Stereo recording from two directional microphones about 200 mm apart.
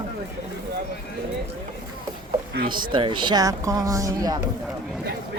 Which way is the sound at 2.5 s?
45° right (ahead or behind).